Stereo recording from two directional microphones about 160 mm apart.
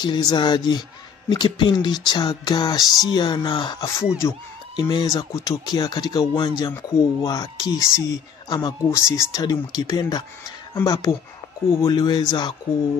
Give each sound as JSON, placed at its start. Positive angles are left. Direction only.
{"t": 0.0, "sound": "speech", "side_deg": 30}
{"t": 4.2, "sound": "speech", "side_deg": 15}